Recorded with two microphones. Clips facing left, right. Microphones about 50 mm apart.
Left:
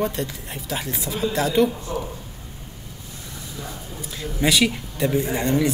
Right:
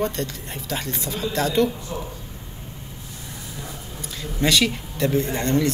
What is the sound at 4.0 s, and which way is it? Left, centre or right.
Speech, centre.